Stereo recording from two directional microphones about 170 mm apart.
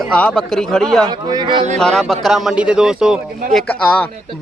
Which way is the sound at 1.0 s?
25° right (ahead or behind).